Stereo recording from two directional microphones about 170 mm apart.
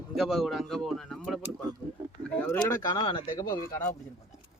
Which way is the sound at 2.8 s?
25° left (ahead or behind).